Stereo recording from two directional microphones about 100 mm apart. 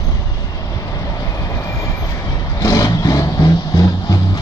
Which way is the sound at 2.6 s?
35° left (ahead or behind).